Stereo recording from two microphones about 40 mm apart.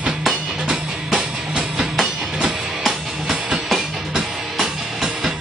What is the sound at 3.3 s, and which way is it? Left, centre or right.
Music, right.